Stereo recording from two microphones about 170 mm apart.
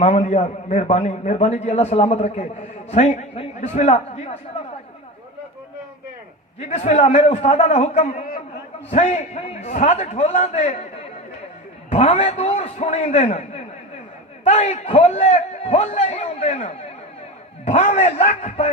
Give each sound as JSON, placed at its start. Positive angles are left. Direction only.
{"t": 0.0, "sound": "a man's voice", "side_deg": 40}
{"t": 6.6, "sound": "a man's voice", "side_deg": 40}